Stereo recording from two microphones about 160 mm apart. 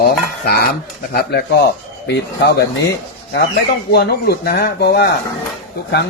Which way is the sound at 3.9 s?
85° left.